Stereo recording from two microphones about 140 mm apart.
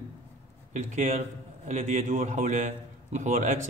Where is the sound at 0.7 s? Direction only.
55° right (ahead or behind).